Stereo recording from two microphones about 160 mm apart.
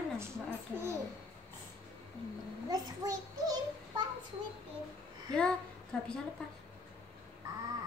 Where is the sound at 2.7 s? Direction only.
25° right (ahead or behind).